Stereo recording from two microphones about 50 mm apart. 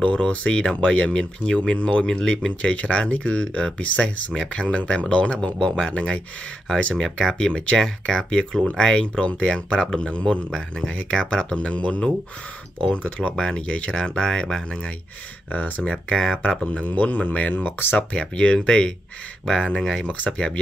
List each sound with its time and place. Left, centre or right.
0.0 s speech: left
6.9 s speech: centre
15.5 s speech: left
17.9 s speech: centre